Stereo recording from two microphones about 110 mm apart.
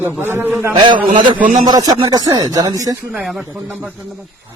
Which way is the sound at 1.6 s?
35° right (ahead or behind).